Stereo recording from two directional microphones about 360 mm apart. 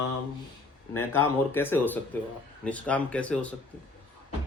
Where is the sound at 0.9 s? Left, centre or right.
Centre.